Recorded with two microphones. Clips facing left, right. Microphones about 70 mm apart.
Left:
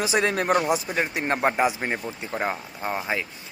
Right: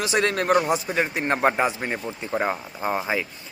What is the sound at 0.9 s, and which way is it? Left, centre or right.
Speech, centre.